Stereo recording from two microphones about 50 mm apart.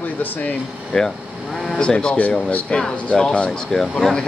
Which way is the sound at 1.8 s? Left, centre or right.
Centre.